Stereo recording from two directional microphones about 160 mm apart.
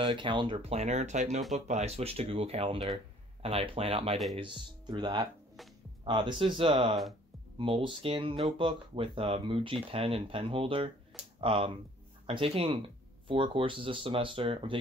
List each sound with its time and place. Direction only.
0.0 s speech: 30° right (ahead or behind)